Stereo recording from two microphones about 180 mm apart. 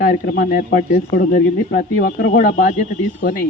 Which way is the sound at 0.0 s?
55° left (ahead or behind).